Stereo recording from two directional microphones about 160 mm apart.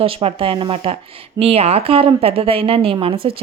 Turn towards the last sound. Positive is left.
turn(degrees=-35)  # may be behind; listen again after turning